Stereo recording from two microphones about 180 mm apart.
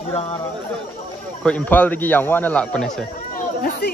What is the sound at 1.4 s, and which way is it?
Speech, 10° left (ahead or behind).